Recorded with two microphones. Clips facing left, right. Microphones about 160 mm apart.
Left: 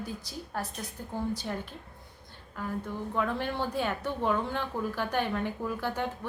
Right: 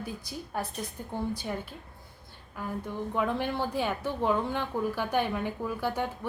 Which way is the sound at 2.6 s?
15° right (ahead or behind).